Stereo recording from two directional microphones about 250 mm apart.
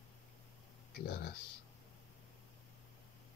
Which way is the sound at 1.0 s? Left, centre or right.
Left.